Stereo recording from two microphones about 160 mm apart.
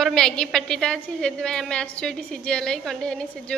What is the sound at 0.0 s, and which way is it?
A woman's voice, 5° left (ahead or behind).